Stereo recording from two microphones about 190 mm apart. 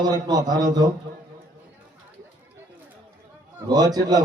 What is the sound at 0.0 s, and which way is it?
Speech, 20° right (ahead or behind).